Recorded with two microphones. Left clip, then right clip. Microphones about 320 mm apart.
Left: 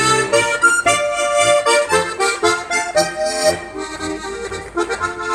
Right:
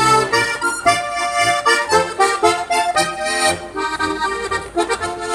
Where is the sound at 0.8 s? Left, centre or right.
Right.